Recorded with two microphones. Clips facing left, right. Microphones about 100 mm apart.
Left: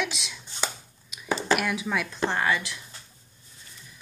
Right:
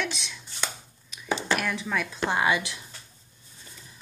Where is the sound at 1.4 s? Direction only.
5° left (ahead or behind).